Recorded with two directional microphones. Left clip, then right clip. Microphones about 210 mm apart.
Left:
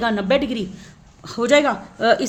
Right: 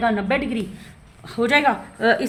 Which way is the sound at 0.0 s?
45° left (ahead or behind).